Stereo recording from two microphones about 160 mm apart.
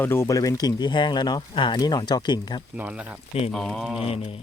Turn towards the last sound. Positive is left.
turn(degrees=0)  # may be behind; listen again after turning